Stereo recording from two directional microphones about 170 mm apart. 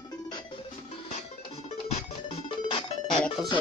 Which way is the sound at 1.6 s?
35° left (ahead or behind).